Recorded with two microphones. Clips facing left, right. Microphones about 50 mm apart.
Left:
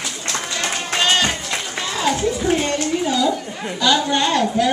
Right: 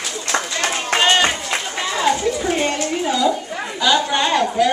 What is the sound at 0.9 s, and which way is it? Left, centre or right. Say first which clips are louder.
Music: right 3 dB; centre.